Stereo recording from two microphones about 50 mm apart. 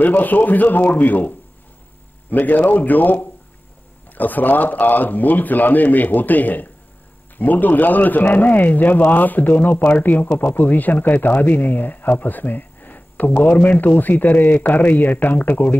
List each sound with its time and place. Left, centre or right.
0.0 s speech: left
2.3 s speech: left